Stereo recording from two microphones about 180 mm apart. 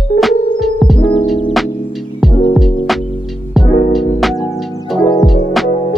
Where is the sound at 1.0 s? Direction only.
30° left (ahead or behind).